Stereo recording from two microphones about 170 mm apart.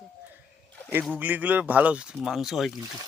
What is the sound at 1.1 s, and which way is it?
A man's voice, 10° right (ahead or behind).